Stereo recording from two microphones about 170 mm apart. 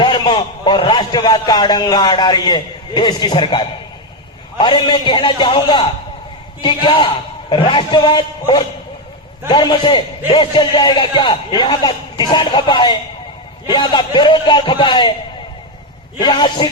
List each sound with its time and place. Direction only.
0.0 s a man's voice: 30° left (ahead or behind)
16.2 s a man's voice: 25° left (ahead or behind)